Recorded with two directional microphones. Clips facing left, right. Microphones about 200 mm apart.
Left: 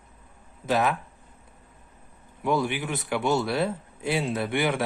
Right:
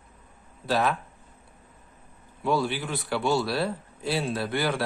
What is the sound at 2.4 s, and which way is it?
A man's voice, 20° left (ahead or behind).